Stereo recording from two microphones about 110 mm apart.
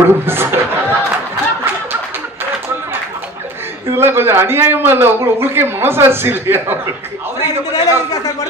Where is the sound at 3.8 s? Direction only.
20° right (ahead or behind).